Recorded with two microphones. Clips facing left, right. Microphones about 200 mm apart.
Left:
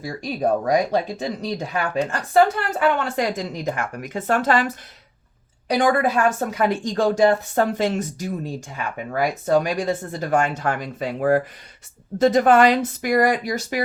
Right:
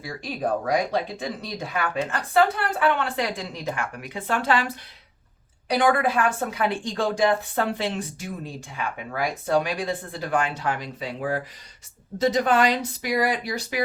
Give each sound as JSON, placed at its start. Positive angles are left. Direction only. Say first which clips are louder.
{"t": 0.0, "sound": "speech", "louder": "left 5 dB", "side_deg": 40}
{"t": 5.8, "sound": "speech", "louder": "left 3 dB", "side_deg": 40}